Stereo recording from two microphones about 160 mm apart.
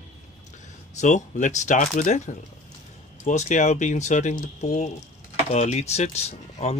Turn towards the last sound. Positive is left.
turn(degrees=40)  # may be behind; listen again after turning